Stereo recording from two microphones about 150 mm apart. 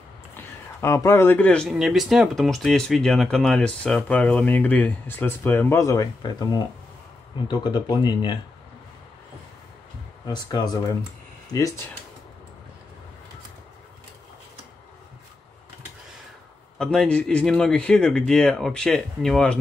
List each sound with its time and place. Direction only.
0.7 s speech: 20° left (ahead or behind)
10.2 s speech: 25° left (ahead or behind)
16.7 s a man's voice: 5° left (ahead or behind)